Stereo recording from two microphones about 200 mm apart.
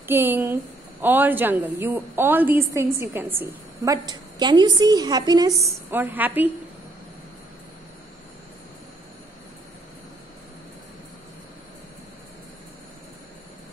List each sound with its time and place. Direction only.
0.1 s a woman's voice: 10° right (ahead or behind)